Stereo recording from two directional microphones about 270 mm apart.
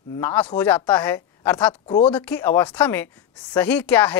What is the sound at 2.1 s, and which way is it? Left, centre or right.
A woman's voice, centre.